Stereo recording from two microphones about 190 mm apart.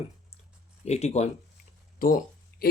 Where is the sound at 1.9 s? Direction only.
50° left (ahead or behind).